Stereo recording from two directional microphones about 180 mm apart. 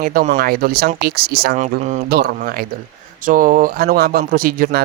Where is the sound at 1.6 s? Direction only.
40° right (ahead or behind).